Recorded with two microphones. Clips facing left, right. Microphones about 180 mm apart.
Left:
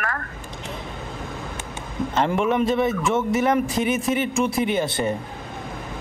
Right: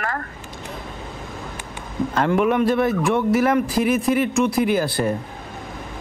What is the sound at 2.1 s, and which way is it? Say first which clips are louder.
Speech: right 2 dB; centre (ahead or behind).